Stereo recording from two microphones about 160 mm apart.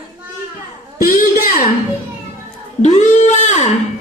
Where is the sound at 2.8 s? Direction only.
50° left (ahead or behind).